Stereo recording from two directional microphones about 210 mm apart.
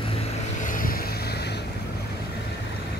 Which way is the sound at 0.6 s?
40° left (ahead or behind).